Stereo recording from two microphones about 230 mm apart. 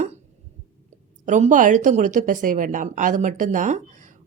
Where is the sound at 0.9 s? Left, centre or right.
Right.